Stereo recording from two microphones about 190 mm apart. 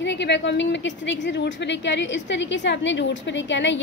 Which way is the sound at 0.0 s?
65° left (ahead or behind).